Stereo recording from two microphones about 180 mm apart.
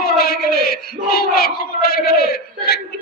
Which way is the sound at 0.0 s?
55° left (ahead or behind).